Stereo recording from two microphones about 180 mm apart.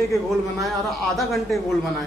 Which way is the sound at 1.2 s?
Centre (ahead or behind).